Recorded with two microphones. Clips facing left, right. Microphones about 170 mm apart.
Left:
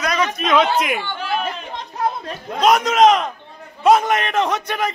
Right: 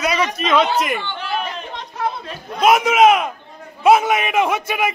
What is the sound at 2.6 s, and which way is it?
A man's voice, 5° right (ahead or behind).